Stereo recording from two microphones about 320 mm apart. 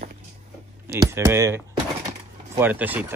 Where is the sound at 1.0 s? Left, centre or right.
Centre.